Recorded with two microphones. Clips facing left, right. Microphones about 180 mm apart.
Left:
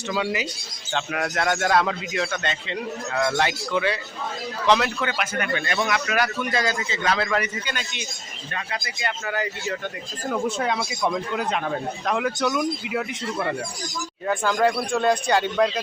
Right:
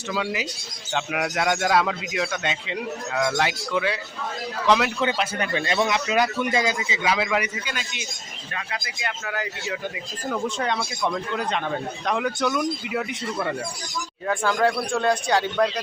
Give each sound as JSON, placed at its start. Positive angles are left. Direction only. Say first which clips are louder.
{"t": 0.1, "sound": "a man's voice", "louder": "left 1 dB", "side_deg": 0}
{"t": 4.9, "sound": "a man's voice", "louder": "right 2 dB", "side_deg": -25}